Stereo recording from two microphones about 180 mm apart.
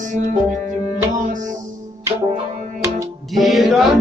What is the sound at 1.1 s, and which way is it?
Music, 45° right (ahead or behind).